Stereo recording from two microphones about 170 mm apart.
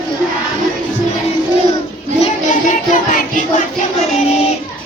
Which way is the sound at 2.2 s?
45° left (ahead or behind).